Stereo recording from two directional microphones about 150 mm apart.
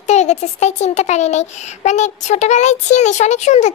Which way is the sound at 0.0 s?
50° left (ahead or behind).